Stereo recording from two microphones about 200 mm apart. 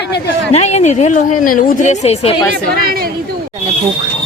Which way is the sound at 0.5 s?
35° left (ahead or behind).